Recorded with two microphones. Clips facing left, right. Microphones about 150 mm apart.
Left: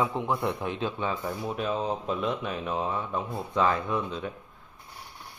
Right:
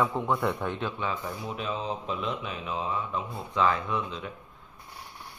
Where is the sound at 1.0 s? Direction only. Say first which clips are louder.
Left 2 dB; 40° left (ahead or behind).